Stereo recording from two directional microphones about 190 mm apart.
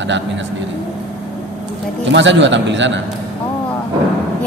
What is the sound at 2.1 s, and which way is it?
Speech, 70° right (ahead or behind).